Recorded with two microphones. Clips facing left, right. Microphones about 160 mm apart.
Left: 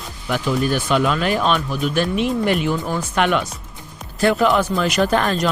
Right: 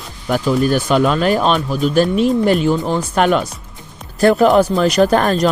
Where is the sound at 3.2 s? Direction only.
40° right (ahead or behind).